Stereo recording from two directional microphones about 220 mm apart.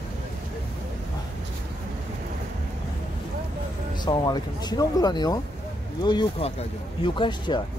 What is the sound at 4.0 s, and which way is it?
Speech, 20° left (ahead or behind).